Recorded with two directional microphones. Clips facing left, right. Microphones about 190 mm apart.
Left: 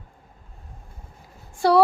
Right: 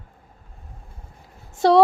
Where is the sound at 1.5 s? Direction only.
20° right (ahead or behind).